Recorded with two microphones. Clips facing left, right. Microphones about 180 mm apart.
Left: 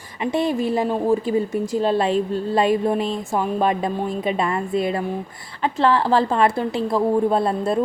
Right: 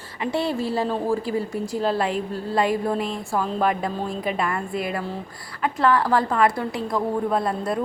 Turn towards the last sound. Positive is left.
turn(degrees=25)  # may be behind; listen again after turning